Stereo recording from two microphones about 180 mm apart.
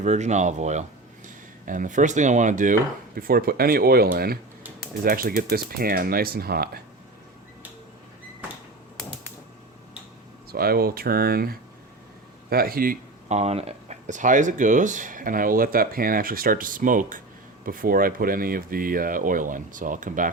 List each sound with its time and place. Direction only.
0.0 s speech: 40° right (ahead or behind)
3.2 s speech: 55° right (ahead or behind)
10.5 s speech: 55° right (ahead or behind)